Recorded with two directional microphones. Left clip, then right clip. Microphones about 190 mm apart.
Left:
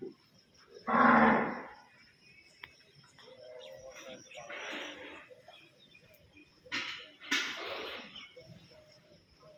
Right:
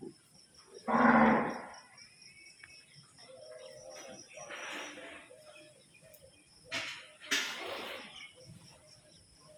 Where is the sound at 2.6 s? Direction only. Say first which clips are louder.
Left 5 dB; 20° left (ahead or behind).